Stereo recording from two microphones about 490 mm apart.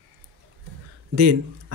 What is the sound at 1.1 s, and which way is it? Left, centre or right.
Speech, right.